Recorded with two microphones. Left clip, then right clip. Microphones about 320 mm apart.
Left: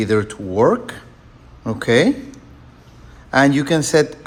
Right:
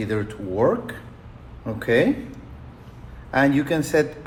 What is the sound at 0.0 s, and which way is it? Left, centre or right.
Speech, left.